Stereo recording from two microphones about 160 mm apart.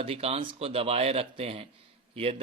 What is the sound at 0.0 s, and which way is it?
Speech, 40° right (ahead or behind).